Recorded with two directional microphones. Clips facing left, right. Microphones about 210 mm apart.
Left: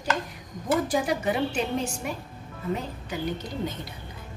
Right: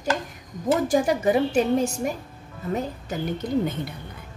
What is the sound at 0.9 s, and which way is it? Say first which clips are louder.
A woman's voice: right 5 dB; 45° right (ahead or behind).